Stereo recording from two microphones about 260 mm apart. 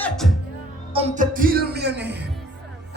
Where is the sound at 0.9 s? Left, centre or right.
Right.